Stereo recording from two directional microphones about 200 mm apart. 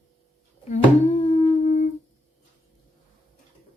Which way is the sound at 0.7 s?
35° left (ahead or behind).